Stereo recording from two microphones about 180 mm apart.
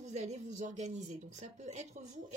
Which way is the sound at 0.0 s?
40° right (ahead or behind).